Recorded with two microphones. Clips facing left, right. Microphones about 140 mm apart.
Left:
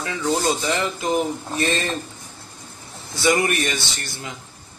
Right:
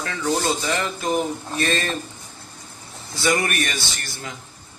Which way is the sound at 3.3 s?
20° left (ahead or behind).